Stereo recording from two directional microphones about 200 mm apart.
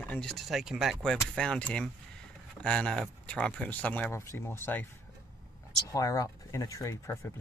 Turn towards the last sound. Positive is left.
turn(degrees=15)  # may be behind; listen again after turning